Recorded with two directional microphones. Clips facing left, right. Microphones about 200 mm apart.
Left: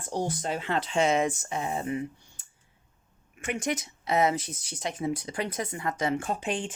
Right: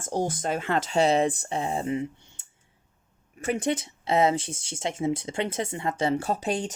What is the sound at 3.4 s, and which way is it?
Speech, 30° right (ahead or behind).